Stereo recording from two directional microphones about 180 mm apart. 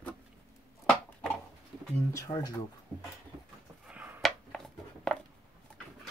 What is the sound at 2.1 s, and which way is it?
Speech, 20° left (ahead or behind).